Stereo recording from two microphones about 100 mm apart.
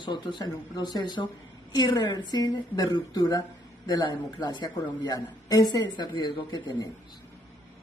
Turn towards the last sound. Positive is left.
turn(degrees=45)  # may be behind; listen again after turning